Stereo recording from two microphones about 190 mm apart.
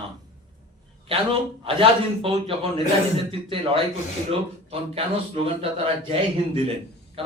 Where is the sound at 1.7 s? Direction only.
30° right (ahead or behind).